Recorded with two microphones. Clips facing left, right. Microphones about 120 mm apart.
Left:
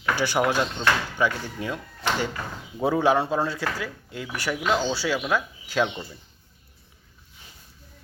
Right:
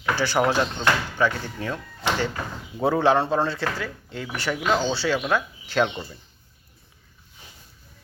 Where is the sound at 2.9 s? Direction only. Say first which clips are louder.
Right 1 dB; 10° left (ahead or behind).